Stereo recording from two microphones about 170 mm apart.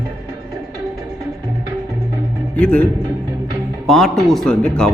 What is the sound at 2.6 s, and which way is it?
Speech, 10° left (ahead or behind).